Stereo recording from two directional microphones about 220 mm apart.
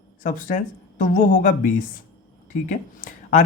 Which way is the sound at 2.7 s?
35° left (ahead or behind).